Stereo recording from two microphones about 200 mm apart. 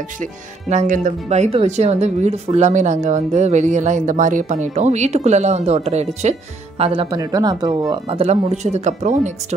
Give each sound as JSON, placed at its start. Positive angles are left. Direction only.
{"t": 0.2, "sound": "speech", "side_deg": -40}